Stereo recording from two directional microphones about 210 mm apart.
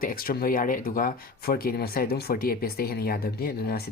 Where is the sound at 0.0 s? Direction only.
45° left (ahead or behind).